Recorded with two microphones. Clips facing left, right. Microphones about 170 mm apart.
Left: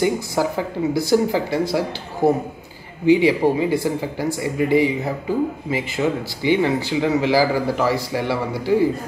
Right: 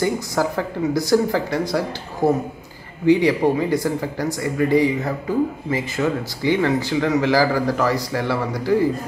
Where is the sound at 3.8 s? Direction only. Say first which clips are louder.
Even; 25° left (ahead or behind).